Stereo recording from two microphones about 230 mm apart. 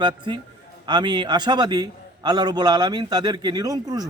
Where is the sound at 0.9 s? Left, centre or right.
Centre.